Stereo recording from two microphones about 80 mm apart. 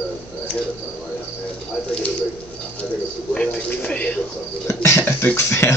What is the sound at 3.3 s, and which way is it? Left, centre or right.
Speech, centre.